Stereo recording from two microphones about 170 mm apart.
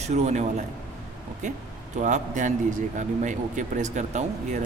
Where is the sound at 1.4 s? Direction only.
45° right (ahead or behind).